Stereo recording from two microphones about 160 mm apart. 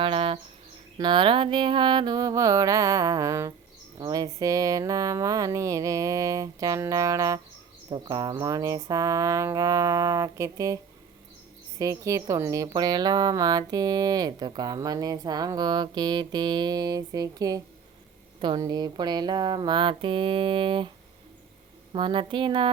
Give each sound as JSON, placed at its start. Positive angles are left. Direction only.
{"t": 0.0, "sound": "a sound", "side_deg": -35}
{"t": 0.9, "sound": "speech", "side_deg": -30}
{"t": 11.8, "sound": "speech", "side_deg": -20}
{"t": 21.9, "sound": "speech", "side_deg": -30}